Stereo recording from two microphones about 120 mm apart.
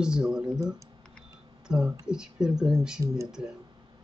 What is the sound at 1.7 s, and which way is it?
Speech, 5° right (ahead or behind).